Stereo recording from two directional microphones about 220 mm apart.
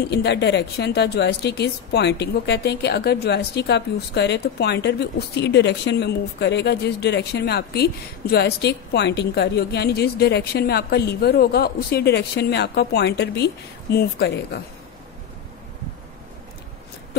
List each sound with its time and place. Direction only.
0.0 s speech: 50° left (ahead or behind)